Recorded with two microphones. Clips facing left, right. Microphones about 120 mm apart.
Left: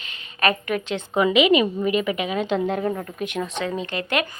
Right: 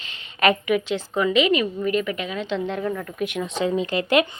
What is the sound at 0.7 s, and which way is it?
Speech, 10° right (ahead or behind).